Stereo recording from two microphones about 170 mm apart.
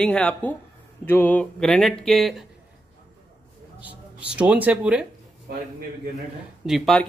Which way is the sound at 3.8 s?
10° right (ahead or behind).